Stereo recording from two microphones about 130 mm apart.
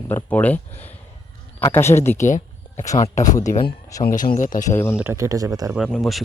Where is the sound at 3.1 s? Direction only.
70° left (ahead or behind).